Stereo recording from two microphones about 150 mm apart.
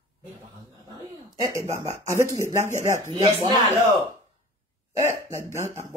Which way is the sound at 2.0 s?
20° right (ahead or behind).